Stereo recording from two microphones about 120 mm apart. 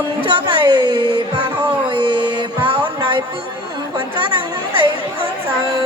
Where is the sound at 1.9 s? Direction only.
40° right (ahead or behind).